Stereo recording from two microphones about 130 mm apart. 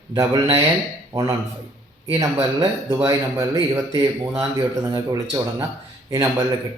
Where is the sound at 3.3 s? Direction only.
20° right (ahead or behind).